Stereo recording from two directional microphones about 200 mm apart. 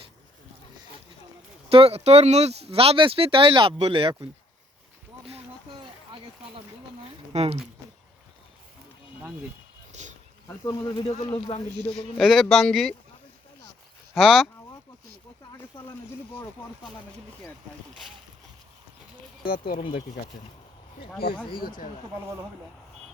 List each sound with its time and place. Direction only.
1.7 s speech: 30° right (ahead or behind)
7.3 s speech: 35° right (ahead or behind)
9.9 s a sound: 35° right (ahead or behind)
10.7 s speech: 20° left (ahead or behind)
12.1 s speech: centre (ahead or behind)
14.1 s speech: centre (ahead or behind)
19.4 s speech: 45° left (ahead or behind)
19.8 s speech: 25° left (ahead or behind)